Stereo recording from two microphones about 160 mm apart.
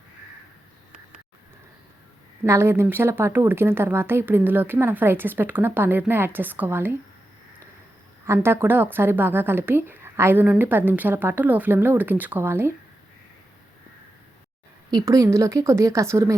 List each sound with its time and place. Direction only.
2.4 s speech: 15° right (ahead or behind)
8.3 s speech: 15° right (ahead or behind)
14.8 s a woman's voice: 25° right (ahead or behind)